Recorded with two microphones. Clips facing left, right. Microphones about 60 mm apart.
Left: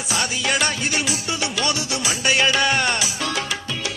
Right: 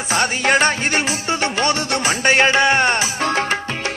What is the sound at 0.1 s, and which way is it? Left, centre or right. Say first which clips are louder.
Music: right 6 dB; right.